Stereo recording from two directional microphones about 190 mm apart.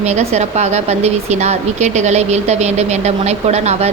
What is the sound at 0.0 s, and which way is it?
Speech, 35° right (ahead or behind).